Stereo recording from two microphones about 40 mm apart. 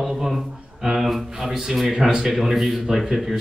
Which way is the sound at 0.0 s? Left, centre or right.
Centre.